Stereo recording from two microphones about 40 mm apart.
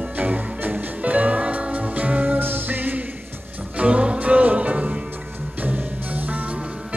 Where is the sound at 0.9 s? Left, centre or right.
Right.